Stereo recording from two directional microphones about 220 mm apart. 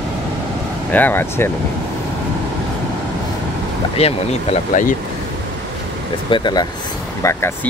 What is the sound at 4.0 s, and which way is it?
Speech, 25° left (ahead or behind).